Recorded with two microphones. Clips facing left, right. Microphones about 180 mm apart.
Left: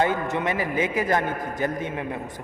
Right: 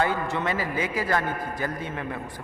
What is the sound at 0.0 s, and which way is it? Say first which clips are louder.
A man's voice: left 2 dB; 20° left (ahead or behind).